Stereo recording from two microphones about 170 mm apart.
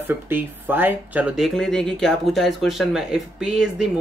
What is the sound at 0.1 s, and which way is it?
Speech, 10° right (ahead or behind).